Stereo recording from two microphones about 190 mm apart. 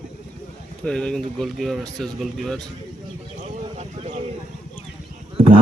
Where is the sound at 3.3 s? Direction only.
35° right (ahead or behind).